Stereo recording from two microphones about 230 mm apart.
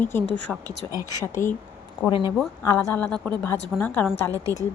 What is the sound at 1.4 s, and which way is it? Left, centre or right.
A woman's voice, centre.